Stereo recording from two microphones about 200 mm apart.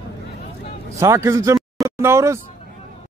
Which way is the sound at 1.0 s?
15° right (ahead or behind).